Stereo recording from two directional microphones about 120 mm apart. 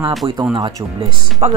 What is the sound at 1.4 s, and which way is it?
Speech, 60° right (ahead or behind).